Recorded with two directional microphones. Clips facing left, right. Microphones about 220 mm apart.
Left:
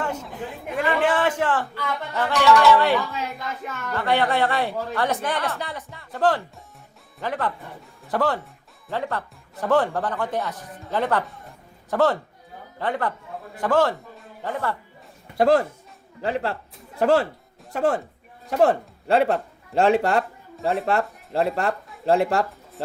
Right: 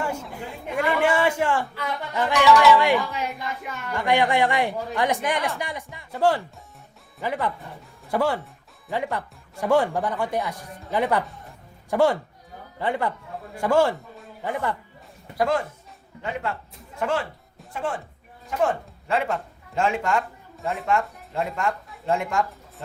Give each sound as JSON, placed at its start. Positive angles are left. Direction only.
{"t": 0.0, "sound": "a man's voice", "side_deg": -10}
{"t": 2.5, "sound": "speech", "side_deg": 0}
{"t": 2.7, "sound": "a man's voice", "side_deg": -15}
{"t": 15.4, "sound": "speech", "side_deg": 35}